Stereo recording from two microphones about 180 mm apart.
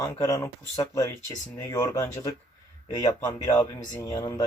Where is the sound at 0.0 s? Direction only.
15° left (ahead or behind).